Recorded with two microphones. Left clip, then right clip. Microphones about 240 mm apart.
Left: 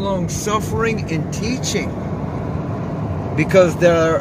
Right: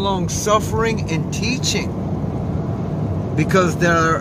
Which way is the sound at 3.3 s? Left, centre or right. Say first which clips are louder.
Left 4 dB; right.